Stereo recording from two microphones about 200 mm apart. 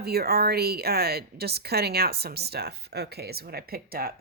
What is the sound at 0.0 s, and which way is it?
Speech, 50° right (ahead or behind).